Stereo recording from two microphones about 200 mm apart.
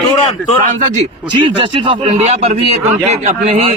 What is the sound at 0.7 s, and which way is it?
Speech, 40° right (ahead or behind).